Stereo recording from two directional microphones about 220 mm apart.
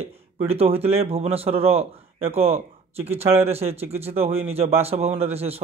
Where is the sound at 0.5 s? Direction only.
25° right (ahead or behind).